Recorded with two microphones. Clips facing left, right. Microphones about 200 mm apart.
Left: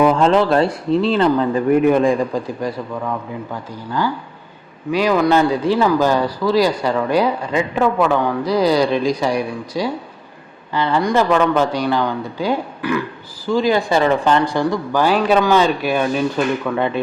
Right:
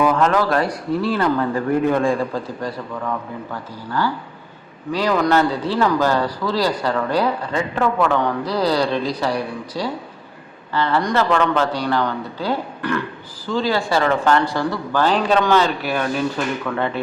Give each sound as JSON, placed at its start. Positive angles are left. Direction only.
{"t": 0.0, "sound": "a man's voice", "side_deg": 30}